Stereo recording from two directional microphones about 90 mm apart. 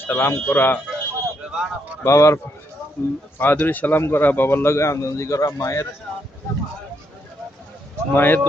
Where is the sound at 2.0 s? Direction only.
35° left (ahead or behind).